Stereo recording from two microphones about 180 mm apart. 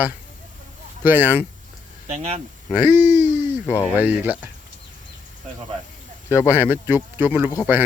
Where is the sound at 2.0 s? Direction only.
35° right (ahead or behind).